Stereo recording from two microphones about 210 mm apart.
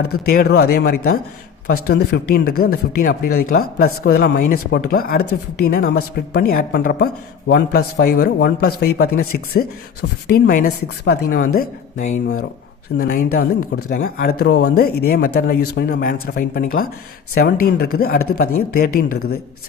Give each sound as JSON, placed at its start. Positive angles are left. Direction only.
{"t": 0.0, "sound": "a woman's voice", "side_deg": 45}